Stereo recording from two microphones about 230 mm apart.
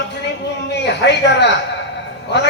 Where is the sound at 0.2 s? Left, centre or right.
Left.